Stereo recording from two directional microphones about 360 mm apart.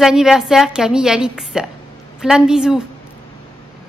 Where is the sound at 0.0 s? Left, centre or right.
Centre.